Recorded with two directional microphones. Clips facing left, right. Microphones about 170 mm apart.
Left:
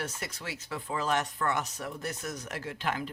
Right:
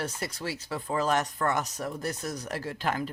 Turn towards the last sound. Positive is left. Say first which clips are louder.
# right 3 dB
turn(degrees=-40)  # may be behind; listen again after turning